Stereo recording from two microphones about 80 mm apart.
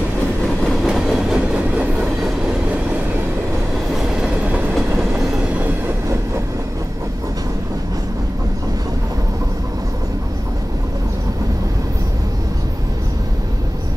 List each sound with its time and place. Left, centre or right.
0.7 s train: centre
4.2 s train: centre
4.7 s train: centre